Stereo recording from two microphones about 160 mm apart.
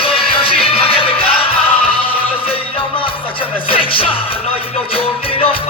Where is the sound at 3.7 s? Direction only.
35° left (ahead or behind).